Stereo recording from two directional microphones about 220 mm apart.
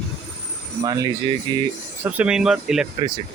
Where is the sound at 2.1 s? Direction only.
5° right (ahead or behind).